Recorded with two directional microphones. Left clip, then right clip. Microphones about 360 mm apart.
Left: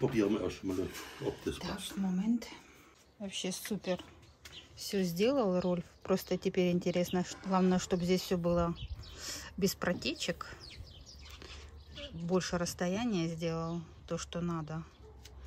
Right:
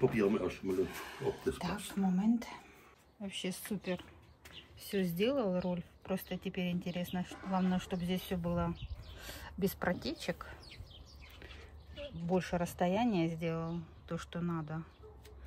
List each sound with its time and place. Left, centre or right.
0.1 s speech: centre
1.6 s speech: right
3.2 s speech: centre
12.3 s speech: centre